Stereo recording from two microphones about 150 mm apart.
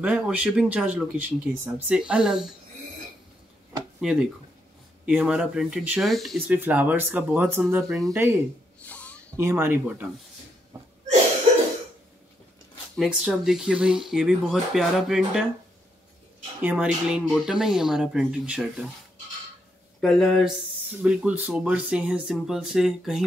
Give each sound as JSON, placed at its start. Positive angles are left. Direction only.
{"t": 0.0, "sound": "speech", "side_deg": -10}
{"t": 4.0, "sound": "speech", "side_deg": -5}
{"t": 6.4, "sound": "speech", "side_deg": -10}
{"t": 8.8, "sound": "a sound", "side_deg": 10}
{"t": 9.4, "sound": "speech", "side_deg": -15}
{"t": 12.9, "sound": "speech", "side_deg": 0}
{"t": 16.6, "sound": "speech", "side_deg": -5}
{"t": 20.0, "sound": "speech", "side_deg": 5}
{"t": 21.0, "sound": "speech", "side_deg": -10}